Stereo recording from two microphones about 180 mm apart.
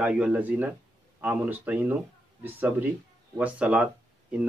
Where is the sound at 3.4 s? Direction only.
5° right (ahead or behind).